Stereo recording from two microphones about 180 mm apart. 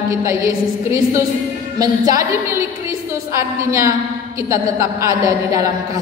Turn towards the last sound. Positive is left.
turn(degrees=-20)  # may be behind; listen again after turning